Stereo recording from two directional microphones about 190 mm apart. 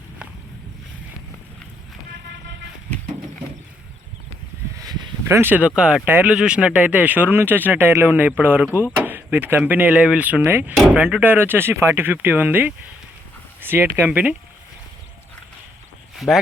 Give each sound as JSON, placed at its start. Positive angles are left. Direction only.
{"t": 2.1, "sound": "vehicle", "side_deg": -65}
{"t": 4.9, "sound": "speech", "side_deg": -15}
{"t": 16.1, "sound": "speech", "side_deg": 0}